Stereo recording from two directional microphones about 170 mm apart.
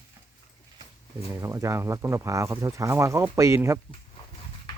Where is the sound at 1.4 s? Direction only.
15° right (ahead or behind).